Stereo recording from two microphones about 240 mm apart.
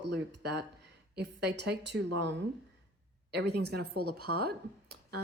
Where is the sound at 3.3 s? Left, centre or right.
Right.